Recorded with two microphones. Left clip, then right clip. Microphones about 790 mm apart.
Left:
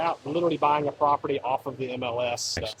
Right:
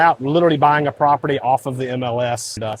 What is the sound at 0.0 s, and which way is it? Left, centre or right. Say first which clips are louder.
Speech: right 12 dB; right.